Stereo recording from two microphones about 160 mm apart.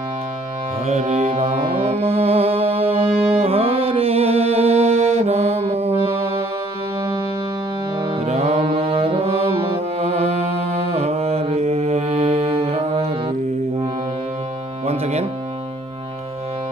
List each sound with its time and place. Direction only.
0.8 s mantra: 45° right (ahead or behind)
3.0 s music: 35° right (ahead or behind)
7.0 s music: 25° right (ahead or behind)
8.3 s brass instrument: 40° right (ahead or behind)
14.9 s music: 40° right (ahead or behind)